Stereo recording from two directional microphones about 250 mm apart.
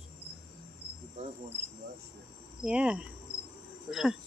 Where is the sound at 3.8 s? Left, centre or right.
Centre.